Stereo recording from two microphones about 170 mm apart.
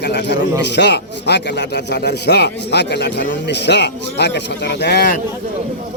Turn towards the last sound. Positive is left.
turn(degrees=65)  # may be behind; listen again after turning